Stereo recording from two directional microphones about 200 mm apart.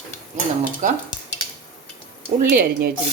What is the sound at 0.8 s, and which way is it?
Speech, 40° right (ahead or behind).